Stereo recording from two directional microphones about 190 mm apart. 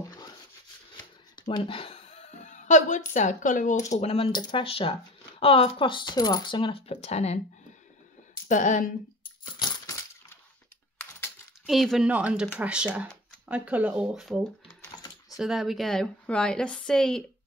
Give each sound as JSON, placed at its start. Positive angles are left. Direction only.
{"t": 1.5, "sound": "a sound", "side_deg": 30}
{"t": 3.1, "sound": "speech", "side_deg": 40}
{"t": 4.0, "sound": "speech", "side_deg": 30}
{"t": 8.5, "sound": "speech", "side_deg": 40}
{"t": 9.6, "sound": "coin", "side_deg": 25}
{"t": 11.0, "sound": "coin", "side_deg": 5}
{"t": 12.5, "sound": "speech", "side_deg": -5}
{"t": 15.0, "sound": "typing", "side_deg": 20}
{"t": 15.3, "sound": "a woman's voice", "side_deg": 0}